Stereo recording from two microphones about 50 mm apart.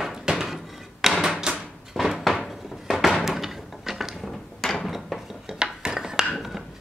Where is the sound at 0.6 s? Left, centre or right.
Centre.